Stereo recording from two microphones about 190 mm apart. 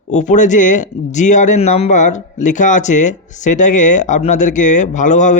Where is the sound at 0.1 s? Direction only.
40° left (ahead or behind).